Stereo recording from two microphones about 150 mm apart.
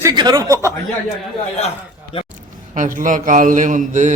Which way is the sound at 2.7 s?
60° right (ahead or behind).